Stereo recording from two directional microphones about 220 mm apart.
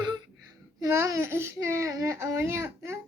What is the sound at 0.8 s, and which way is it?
A child's voice, 10° right (ahead or behind).